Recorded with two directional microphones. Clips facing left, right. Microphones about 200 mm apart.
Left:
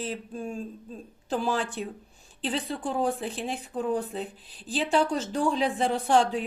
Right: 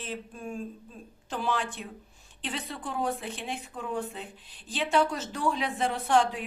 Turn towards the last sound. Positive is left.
turn(degrees=30)  # may be behind; listen again after turning